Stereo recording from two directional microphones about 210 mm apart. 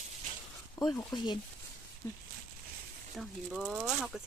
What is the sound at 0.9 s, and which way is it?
Speech, 20° left (ahead or behind).